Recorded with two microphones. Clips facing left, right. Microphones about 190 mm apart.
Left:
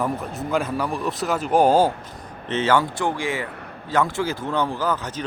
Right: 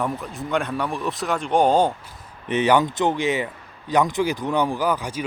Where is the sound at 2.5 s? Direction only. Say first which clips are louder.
Right 2 dB; 15° right (ahead or behind).